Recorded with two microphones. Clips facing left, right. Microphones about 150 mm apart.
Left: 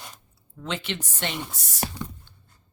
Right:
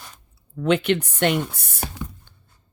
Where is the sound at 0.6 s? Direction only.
60° right (ahead or behind).